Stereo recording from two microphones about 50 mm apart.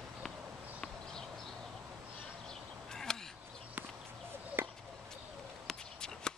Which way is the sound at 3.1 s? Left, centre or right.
Centre.